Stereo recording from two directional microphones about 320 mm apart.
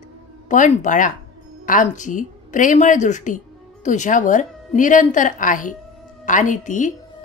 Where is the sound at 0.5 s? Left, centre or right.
Left.